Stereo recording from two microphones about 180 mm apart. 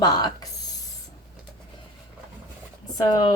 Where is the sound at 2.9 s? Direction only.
25° left (ahead or behind).